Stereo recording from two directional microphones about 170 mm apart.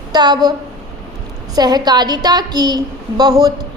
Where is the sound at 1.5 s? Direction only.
25° right (ahead or behind).